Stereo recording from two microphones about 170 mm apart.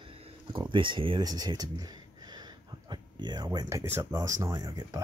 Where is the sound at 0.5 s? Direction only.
30° right (ahead or behind).